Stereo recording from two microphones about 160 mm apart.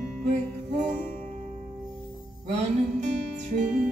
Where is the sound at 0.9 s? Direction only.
50° right (ahead or behind).